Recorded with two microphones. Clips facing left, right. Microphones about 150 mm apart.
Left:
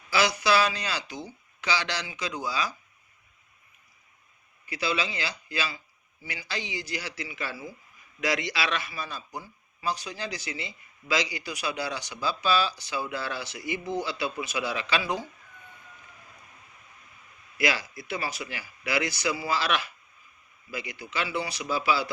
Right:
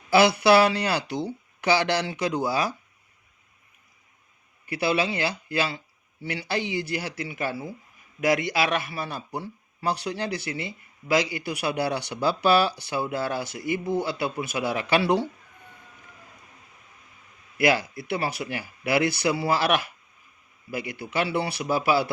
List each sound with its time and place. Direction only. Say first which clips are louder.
0.1 s a man's voice: right 7 dB; 55° right (ahead or behind)
4.6 s a man's voice: right 5 dB; 55° right (ahead or behind)
17.6 s a man's voice: right 6 dB; 55° right (ahead or behind)